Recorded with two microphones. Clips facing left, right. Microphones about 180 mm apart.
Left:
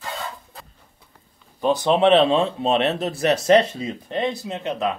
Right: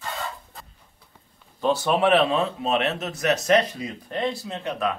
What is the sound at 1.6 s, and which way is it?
Speech, 15° left (ahead or behind).